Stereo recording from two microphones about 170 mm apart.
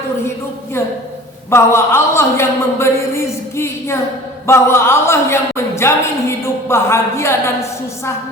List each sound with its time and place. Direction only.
0.8 s a woman's voice: 15° left (ahead or behind)